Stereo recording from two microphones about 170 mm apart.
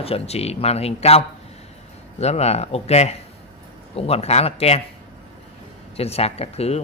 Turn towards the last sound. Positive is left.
turn(degrees=35)  # may be behind; listen again after turning